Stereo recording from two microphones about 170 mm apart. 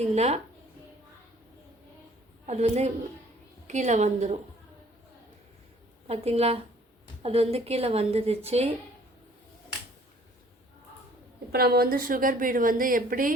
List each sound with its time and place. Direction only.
0.0 s a woman's voice: 40° right (ahead or behind)
2.5 s a woman's voice: 40° right (ahead or behind)
6.1 s a woman's voice: 35° right (ahead or behind)
11.5 s a woman's voice: 65° right (ahead or behind)